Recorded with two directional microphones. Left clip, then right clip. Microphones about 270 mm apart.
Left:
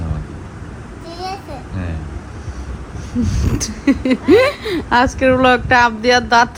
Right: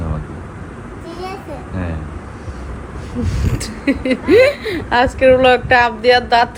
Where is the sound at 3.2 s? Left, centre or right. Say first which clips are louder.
Left 3 dB; left.